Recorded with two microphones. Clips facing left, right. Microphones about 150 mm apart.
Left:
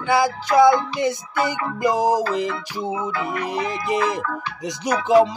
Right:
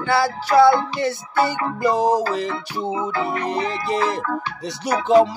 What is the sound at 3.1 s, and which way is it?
Speech, 35° right (ahead or behind).